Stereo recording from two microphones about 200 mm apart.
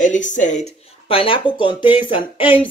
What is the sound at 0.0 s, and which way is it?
Speech, 40° left (ahead or behind).